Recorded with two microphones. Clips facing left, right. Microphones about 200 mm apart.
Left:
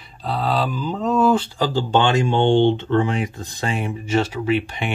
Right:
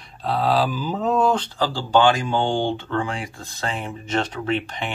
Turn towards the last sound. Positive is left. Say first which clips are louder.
# left 4 dB
turn(degrees=10)  # may be behind; listen again after turning